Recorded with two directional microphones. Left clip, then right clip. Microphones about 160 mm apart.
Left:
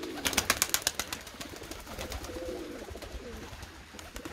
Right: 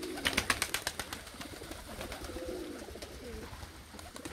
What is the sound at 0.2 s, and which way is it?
Bird, 65° left (ahead or behind).